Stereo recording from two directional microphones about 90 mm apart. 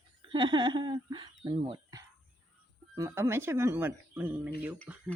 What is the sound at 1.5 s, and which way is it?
Speech, 80° right.